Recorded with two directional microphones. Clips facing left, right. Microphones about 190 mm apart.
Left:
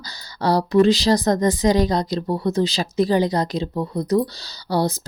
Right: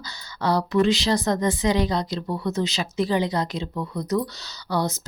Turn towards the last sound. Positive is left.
turn(degrees=35)  # may be behind; listen again after turning